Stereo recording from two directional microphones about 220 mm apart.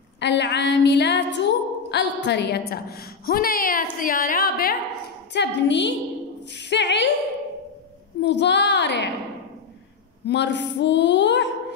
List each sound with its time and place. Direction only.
0.2 s a woman's voice: 50° left (ahead or behind)
8.2 s a woman's voice: 50° left (ahead or behind)
10.2 s a woman's voice: 50° left (ahead or behind)